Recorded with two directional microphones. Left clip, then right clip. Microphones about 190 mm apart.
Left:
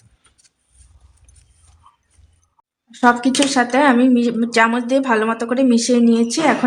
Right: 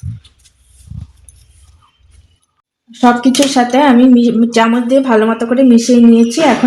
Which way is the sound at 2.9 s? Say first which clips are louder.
Right 4 dB; 20° right (ahead or behind).